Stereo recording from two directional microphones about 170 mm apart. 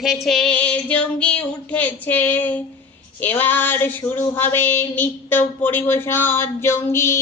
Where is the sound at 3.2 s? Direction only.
10° left (ahead or behind).